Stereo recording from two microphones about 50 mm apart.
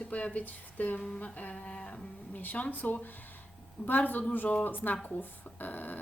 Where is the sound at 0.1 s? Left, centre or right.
Left.